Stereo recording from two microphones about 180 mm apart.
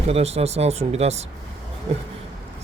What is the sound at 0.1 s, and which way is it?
Ratchet, 35° right (ahead or behind).